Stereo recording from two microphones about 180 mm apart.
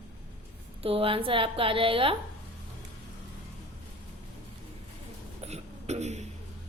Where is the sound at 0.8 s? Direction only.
30° right (ahead or behind).